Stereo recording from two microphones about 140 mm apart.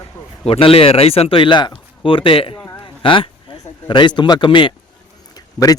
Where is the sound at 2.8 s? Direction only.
35° left (ahead or behind).